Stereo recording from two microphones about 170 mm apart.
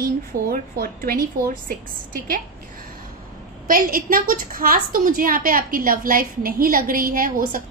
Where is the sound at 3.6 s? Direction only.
55° right (ahead or behind).